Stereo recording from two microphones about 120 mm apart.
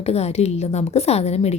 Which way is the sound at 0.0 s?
60° left (ahead or behind).